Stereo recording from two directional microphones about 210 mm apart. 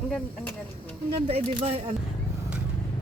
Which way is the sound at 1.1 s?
30° right (ahead or behind).